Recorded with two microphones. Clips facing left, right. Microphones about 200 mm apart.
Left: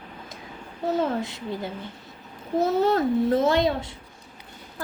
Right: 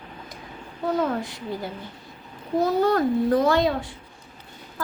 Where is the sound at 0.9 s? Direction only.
25° left (ahead or behind).